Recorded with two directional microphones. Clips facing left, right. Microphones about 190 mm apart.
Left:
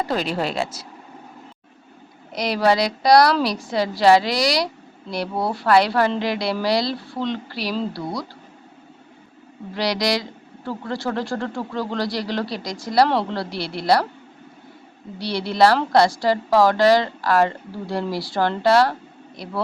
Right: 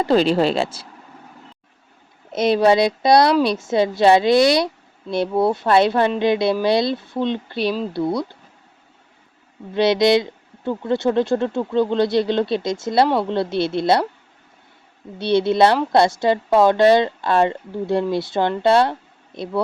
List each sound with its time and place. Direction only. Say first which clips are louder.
0.0 s a woman's voice: right 7 dB; 30° right (ahead or behind)
2.3 s a woman's voice: right 4 dB; 25° right (ahead or behind)
9.7 s a woman's voice: right 7 dB; 25° right (ahead or behind)
15.2 s a woman's voice: right 3 dB; 25° right (ahead or behind)